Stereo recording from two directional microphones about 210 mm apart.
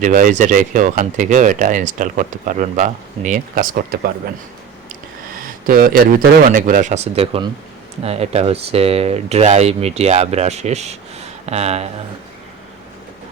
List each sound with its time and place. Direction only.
0.0 s speech: 40° right (ahead or behind)
5.6 s speech: 45° right (ahead or behind)